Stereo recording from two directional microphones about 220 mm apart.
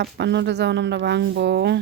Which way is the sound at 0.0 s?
50° right (ahead or behind).